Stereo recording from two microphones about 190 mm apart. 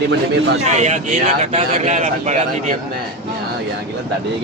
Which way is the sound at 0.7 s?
35° right (ahead or behind).